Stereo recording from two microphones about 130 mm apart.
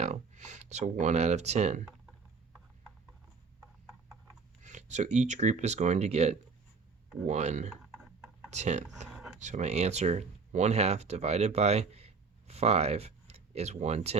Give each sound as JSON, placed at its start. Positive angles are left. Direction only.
{"t": 0.0, "sound": "speech", "side_deg": -65}
{"t": 4.6, "sound": "speech", "side_deg": -65}
{"t": 7.9, "sound": "a sound", "side_deg": -5}
{"t": 8.4, "sound": "speech", "side_deg": -60}
{"t": 9.0, "sound": "a sound", "side_deg": -5}
{"t": 9.4, "sound": "speech", "side_deg": -65}